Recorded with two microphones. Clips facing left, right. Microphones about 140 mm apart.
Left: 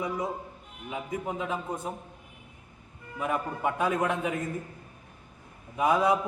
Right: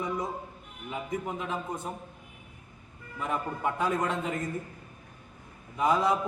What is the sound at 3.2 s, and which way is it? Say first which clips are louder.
A man's voice: left 2 dB; 15° left (ahead or behind).